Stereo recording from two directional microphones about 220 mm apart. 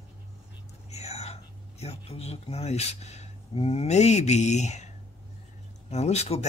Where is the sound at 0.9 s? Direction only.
30° left (ahead or behind).